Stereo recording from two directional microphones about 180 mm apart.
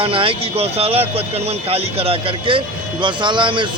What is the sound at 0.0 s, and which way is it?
Speech, 30° right (ahead or behind).